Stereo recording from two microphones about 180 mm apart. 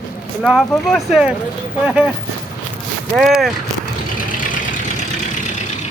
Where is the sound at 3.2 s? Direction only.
Centre (ahead or behind).